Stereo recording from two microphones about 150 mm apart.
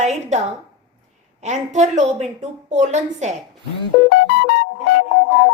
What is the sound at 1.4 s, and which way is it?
A woman's voice, 50° right (ahead or behind).